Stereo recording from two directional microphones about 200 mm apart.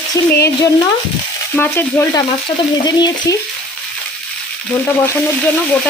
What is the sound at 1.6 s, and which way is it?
Frying, 10° left (ahead or behind).